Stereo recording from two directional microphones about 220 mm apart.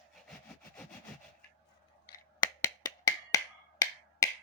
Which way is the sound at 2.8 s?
15° left (ahead or behind).